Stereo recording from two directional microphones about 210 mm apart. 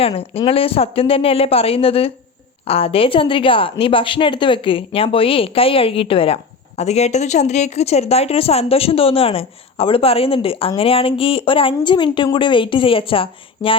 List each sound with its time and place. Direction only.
0.0 s a woman's voice: 25° left (ahead or behind)